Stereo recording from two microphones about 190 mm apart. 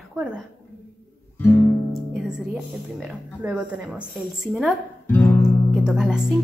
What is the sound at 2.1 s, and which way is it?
A woman's voice, 5° right (ahead or behind).